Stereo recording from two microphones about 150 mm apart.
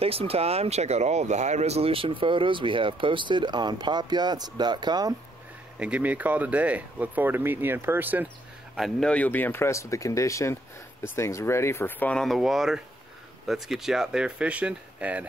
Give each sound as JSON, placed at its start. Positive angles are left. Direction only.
{"t": 0.0, "sound": "speech", "side_deg": -40}
{"t": 5.8, "sound": "speech", "side_deg": -10}
{"t": 8.7, "sound": "speech", "side_deg": 0}